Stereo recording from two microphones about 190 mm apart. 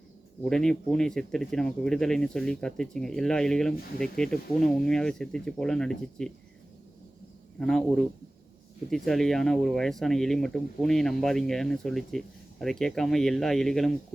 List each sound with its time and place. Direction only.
0.4 s speech: 5° left (ahead or behind)
7.6 s speech: 5° left (ahead or behind)